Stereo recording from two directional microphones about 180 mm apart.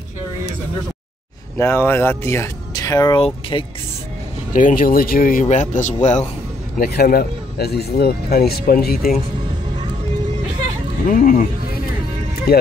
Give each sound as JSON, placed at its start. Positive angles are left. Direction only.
{"t": 1.6, "sound": "speech", "side_deg": 10}
{"t": 4.6, "sound": "speech", "side_deg": 50}
{"t": 6.8, "sound": "speech", "side_deg": 60}
{"t": 11.1, "sound": "speech", "side_deg": 50}
{"t": 12.5, "sound": "speech", "side_deg": 60}